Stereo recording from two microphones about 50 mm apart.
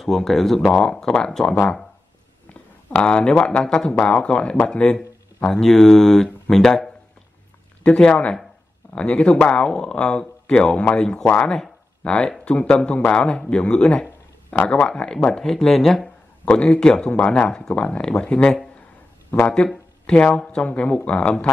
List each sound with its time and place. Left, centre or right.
0.0 s speech: centre
3.0 s speech: centre
5.5 s speech: centre
14.5 s speech: left
14.9 s speech: centre
16.5 s speech: centre
19.5 s speech: centre